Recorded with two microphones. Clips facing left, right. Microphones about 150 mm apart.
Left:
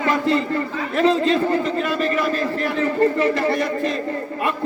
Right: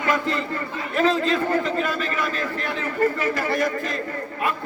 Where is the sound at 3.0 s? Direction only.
30° left (ahead or behind).